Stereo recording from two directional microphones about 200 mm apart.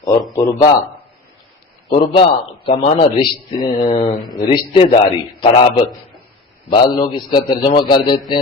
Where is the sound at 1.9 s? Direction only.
25° left (ahead or behind).